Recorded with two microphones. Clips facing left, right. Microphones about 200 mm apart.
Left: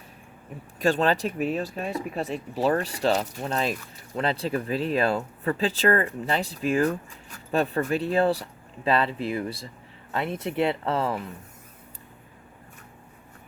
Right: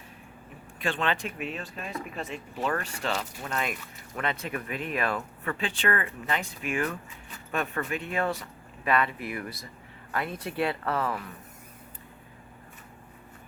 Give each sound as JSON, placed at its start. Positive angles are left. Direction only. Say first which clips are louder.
{"t": 0.8, "sound": "speech", "louder": "left 7 dB", "side_deg": 40}